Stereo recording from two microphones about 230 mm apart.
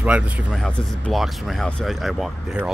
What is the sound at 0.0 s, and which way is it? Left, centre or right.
Speech, centre.